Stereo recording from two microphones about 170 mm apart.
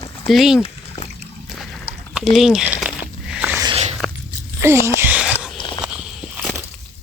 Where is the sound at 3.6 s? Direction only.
35° right (ahead or behind).